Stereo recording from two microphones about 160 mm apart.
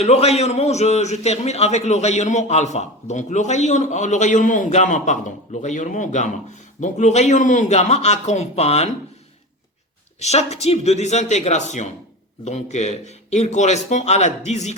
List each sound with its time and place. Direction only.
0.0 s a man's voice: 40° left (ahead or behind)
10.2 s a man's voice: 45° left (ahead or behind)